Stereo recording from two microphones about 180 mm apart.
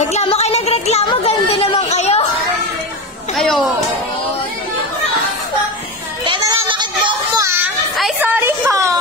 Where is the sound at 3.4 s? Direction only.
Centre (ahead or behind).